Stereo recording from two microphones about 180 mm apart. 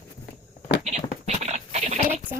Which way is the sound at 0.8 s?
40° right (ahead or behind).